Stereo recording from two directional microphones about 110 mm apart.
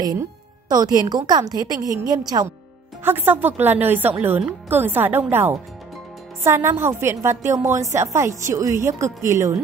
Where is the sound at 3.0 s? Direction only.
20° right (ahead or behind).